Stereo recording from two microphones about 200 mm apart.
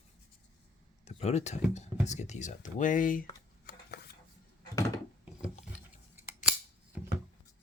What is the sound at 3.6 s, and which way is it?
Dishes, 50° left (ahead or behind).